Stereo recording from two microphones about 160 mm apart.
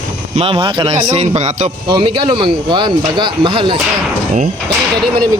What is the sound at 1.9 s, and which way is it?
Speech, 30° right (ahead or behind).